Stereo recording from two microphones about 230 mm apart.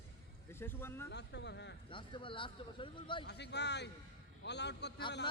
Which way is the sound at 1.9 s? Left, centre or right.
Left.